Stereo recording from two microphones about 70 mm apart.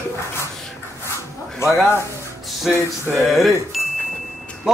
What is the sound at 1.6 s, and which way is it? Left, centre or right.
Speech, left.